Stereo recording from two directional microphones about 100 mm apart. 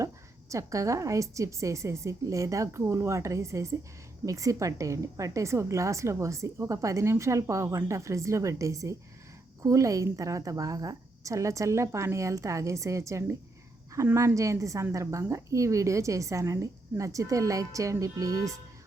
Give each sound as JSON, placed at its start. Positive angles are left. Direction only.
{"t": 0.5, "sound": "a woman's voice", "side_deg": -30}